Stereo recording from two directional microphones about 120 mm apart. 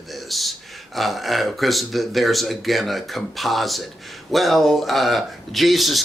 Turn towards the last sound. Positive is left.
turn(degrees=0)  # may be behind; listen again after turning